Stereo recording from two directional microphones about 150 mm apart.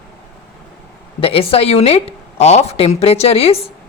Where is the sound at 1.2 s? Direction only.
40° left (ahead or behind).